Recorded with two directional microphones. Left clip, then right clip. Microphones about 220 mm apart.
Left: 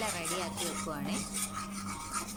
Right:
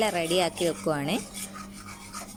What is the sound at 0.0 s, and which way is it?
Speech, 35° right (ahead or behind).